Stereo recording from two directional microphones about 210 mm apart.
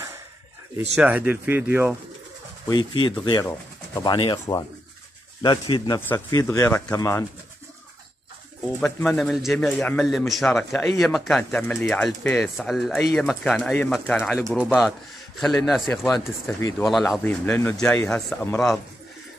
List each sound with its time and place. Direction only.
0.9 s speech: 5° right (ahead or behind)
2.7 s speech: 20° left (ahead or behind)
8.8 s a man's voice: 5° left (ahead or behind)